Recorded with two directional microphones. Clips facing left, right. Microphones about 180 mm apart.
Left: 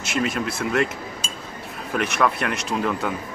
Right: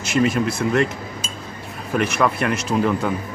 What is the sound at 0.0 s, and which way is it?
Speech, centre (ahead or behind).